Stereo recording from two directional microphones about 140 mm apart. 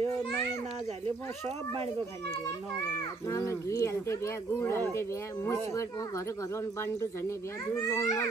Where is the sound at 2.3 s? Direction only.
30° left (ahead or behind).